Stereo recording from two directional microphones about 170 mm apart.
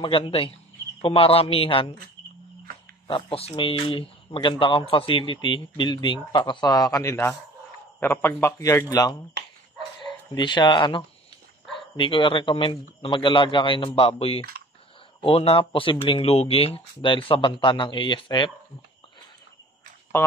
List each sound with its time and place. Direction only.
0.0 s speech: 30° left (ahead or behind)
3.1 s a man's voice: 30° left (ahead or behind)
10.3 s speech: 25° left (ahead or behind)
20.2 s a man's voice: 15° left (ahead or behind)